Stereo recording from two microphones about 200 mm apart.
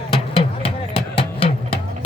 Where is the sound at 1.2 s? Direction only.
30° left (ahead or behind).